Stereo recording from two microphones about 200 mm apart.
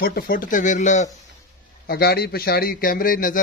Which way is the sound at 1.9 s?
50° left (ahead or behind).